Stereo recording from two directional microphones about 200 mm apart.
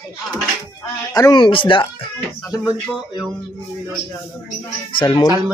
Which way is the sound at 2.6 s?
5° right (ahead or behind).